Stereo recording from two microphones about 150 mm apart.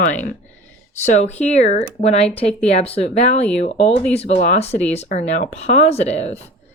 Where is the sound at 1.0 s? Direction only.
50° left (ahead or behind).